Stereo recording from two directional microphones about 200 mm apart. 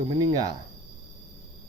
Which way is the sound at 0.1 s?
20° right (ahead or behind).